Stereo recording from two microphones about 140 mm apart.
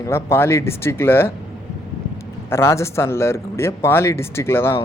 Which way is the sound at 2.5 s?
20° left (ahead or behind).